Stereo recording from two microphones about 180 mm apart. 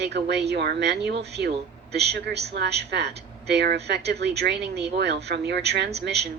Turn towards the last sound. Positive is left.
turn(degrees=-70)  # may be behind; listen again after turning